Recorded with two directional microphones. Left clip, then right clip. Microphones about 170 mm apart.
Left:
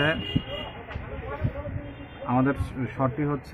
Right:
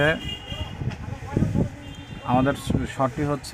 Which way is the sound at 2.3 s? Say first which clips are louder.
Right 3 dB; 45° right (ahead or behind).